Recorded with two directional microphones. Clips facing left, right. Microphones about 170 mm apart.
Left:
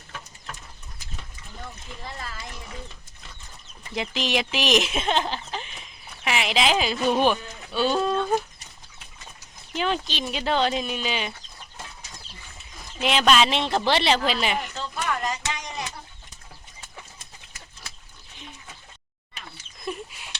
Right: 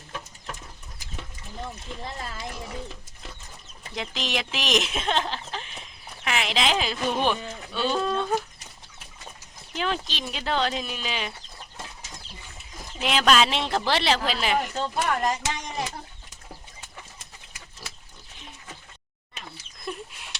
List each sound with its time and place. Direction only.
3.9 s speech: 5° left (ahead or behind)
9.7 s speech: centre (ahead or behind)
13.0 s speech: centre (ahead or behind)
14.8 s speech: 45° right (ahead or behind)
19.8 s a sound: centre (ahead or behind)